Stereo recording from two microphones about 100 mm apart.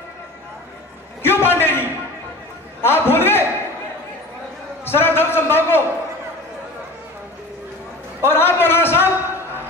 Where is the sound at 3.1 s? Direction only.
20° left (ahead or behind).